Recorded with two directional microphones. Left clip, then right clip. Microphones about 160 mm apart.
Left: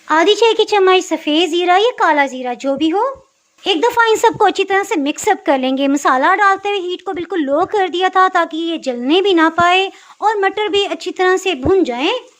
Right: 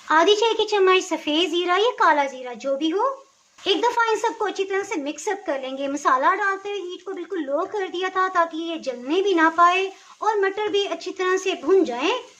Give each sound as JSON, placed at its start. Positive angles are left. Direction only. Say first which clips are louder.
{"t": 0.1, "sound": "a woman's voice", "louder": "left 6 dB", "side_deg": 35}